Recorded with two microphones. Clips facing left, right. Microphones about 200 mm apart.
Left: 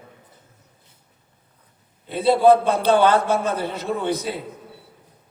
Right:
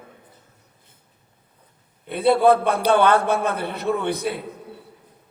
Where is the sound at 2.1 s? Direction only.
60° right (ahead or behind).